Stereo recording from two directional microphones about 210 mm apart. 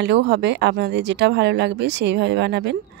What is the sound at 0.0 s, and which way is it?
Speech, 55° right (ahead or behind).